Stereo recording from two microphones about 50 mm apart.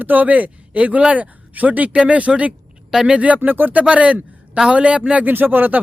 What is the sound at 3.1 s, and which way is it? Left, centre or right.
Speech, right.